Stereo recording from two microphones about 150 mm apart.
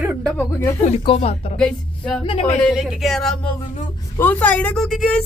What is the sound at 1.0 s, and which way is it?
Speech, 40° left (ahead or behind).